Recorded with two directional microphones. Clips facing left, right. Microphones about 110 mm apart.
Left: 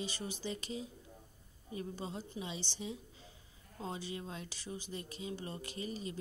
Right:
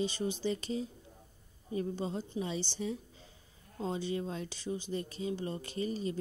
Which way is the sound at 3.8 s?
30° right (ahead or behind).